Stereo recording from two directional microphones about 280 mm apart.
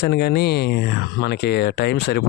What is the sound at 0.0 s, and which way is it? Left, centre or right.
Speech, left.